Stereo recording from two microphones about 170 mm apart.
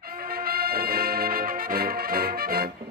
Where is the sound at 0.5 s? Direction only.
65° right (ahead or behind).